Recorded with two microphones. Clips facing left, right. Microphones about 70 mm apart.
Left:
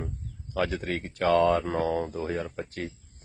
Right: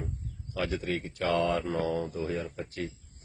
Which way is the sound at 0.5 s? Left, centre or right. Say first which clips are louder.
Left 3 dB; left.